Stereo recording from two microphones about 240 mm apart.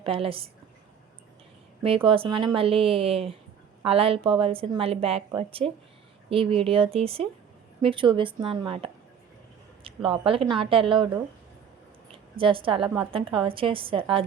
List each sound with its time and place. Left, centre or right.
0.0 s a woman's voice: right
2.0 s a woman's voice: right
12.4 s a woman's voice: right